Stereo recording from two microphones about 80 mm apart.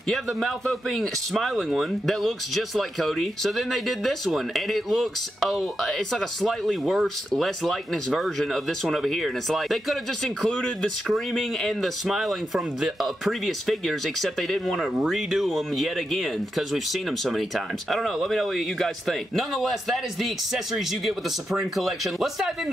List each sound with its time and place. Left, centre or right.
0.1 s speech: centre